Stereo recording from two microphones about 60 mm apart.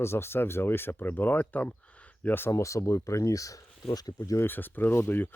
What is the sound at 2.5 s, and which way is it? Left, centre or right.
Speech, left.